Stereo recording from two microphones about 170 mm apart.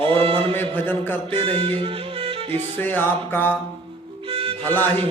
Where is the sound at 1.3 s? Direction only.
35° right (ahead or behind).